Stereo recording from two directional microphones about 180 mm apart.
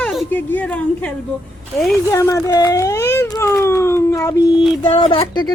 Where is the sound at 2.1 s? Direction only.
15° left (ahead or behind).